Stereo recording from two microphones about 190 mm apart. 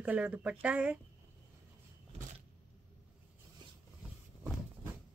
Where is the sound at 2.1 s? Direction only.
35° right (ahead or behind).